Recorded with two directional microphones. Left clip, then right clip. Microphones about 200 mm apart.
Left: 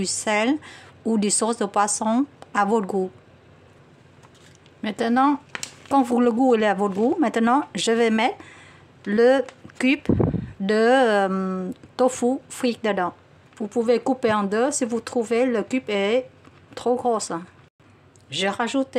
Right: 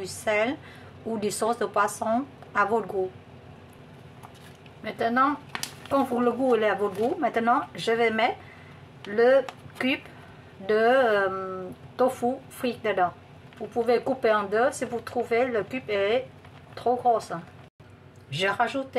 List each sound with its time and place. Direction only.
0.0 s a woman's voice: 50° left (ahead or behind)
4.8 s speech: 55° left (ahead or behind)
5.5 s a sound: centre (ahead or behind)
5.9 s a woman's voice: 55° left (ahead or behind)